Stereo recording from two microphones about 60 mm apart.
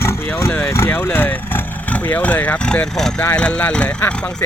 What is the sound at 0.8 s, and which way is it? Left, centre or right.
Vehicle, left.